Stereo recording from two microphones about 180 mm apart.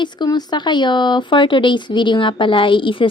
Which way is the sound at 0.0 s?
25° left (ahead or behind).